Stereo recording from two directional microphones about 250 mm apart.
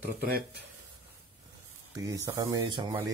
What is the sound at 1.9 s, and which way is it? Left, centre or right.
Speech, centre.